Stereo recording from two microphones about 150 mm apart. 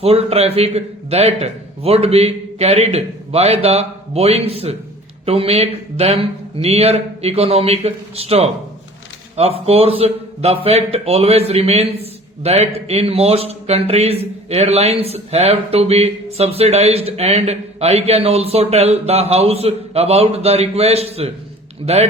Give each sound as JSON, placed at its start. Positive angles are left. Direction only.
{"t": 0.0, "sound": "a man's voice", "side_deg": -40}